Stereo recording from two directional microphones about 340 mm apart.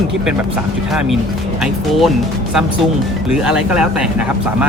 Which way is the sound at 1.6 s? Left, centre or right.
Centre.